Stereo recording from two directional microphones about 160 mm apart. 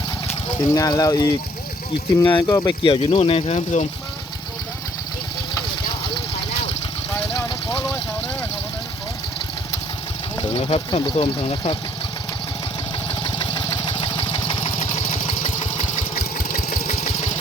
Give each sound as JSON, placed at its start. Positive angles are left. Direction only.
{"t": 0.6, "sound": "speech", "side_deg": 20}
{"t": 2.8, "sound": "speech", "side_deg": 35}
{"t": 10.5, "sound": "speech", "side_deg": 35}
{"t": 13.2, "sound": "vehicle", "side_deg": 30}
{"t": 16.0, "sound": "engine", "side_deg": 50}